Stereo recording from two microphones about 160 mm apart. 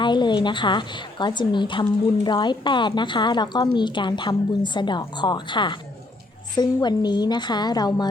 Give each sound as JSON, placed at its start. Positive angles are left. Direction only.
{"t": 0.0, "sound": "a woman's voice", "side_deg": 30}
{"t": 6.8, "sound": "a woman's voice", "side_deg": 25}